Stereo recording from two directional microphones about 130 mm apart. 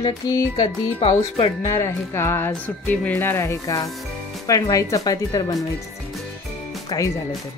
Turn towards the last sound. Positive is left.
turn(degrees=30)  # may be behind; listen again after turning